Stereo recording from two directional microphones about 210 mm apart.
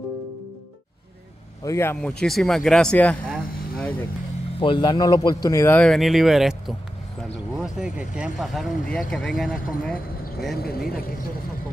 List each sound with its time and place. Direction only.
1.6 s speech: 15° left (ahead or behind)
4.6 s a man's voice: 25° left (ahead or behind); by 9.9 s centre (ahead or behind)
10.6 s speech: 45° left (ahead or behind)